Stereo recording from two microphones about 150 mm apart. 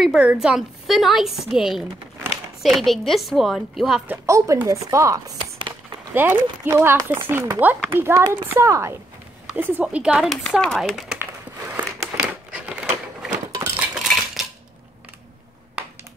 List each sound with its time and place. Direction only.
0.0 s a woman's voice: 5° right (ahead or behind)
4.1 s speech: 20° right (ahead or behind)
10.3 s a woman's voice: 5° left (ahead or behind)
11.1 s a sound: 15° right (ahead or behind)
13.7 s cutlery: centre (ahead or behind)
15.8 s a sound: 5° right (ahead or behind)